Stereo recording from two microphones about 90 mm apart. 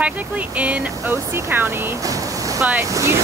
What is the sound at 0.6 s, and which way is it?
Speech, 15° right (ahead or behind).